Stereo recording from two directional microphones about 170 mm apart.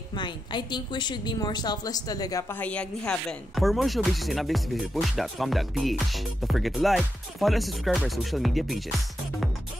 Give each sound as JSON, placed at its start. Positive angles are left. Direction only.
{"t": 0.1, "sound": "a woman's voice", "side_deg": 25}
{"t": 2.5, "sound": "speech", "side_deg": 10}